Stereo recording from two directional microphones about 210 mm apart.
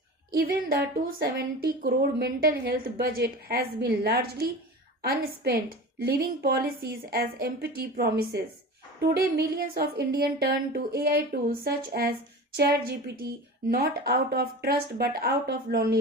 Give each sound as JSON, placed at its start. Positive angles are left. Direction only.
{"t": 0.3, "sound": "a woman's voice", "side_deg": -45}